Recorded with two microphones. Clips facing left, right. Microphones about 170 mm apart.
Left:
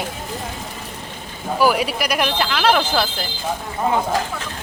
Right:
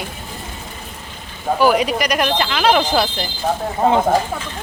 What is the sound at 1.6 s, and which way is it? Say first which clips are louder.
Speech: right 2 dB; 5° left (ahead or behind).